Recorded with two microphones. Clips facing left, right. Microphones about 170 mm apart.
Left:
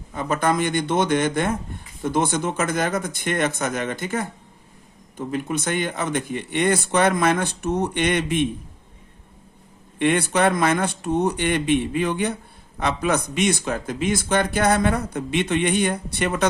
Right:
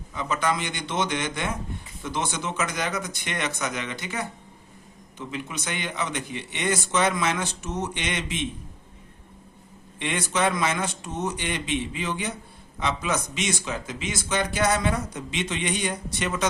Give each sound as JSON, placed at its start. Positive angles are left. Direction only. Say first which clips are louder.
{"t": 0.1, "sound": "speech", "louder": "left 4 dB", "side_deg": 50}
{"t": 10.0, "sound": "speech", "louder": "left 6 dB", "side_deg": 55}